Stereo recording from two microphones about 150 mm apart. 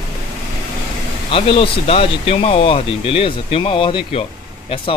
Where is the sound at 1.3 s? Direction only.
40° left (ahead or behind).